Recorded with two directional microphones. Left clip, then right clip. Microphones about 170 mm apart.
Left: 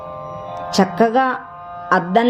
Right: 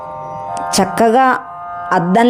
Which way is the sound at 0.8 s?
60° right (ahead or behind).